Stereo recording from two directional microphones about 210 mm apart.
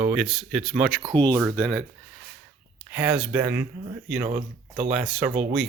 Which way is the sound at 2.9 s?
5° right (ahead or behind).